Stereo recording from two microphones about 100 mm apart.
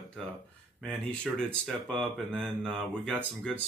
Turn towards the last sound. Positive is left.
turn(degrees=10)  # may be behind; listen again after turning